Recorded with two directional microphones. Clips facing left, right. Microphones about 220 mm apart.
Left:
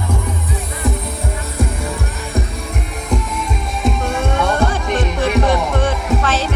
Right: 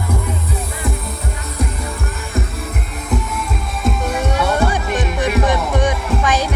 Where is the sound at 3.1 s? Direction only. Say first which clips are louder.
Left 1 dB; centre (ahead or behind).